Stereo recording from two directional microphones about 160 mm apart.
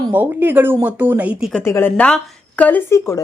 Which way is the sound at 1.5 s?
15° left (ahead or behind).